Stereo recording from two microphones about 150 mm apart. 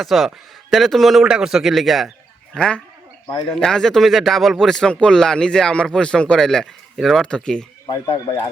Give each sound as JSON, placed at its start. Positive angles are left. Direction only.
{"t": 0.0, "sound": "a man's voice", "side_deg": 0}
{"t": 8.0, "sound": "speech", "side_deg": 25}